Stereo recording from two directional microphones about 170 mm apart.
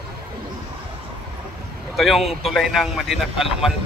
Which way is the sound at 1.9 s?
Centre (ahead or behind).